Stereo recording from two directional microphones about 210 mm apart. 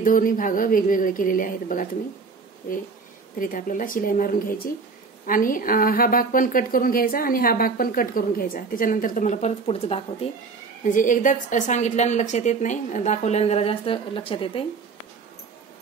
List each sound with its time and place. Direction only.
0.0 s a woman's voice: 40° left (ahead or behind)
3.3 s a woman's voice: 40° left (ahead or behind)
10.8 s a woman's voice: 40° left (ahead or behind)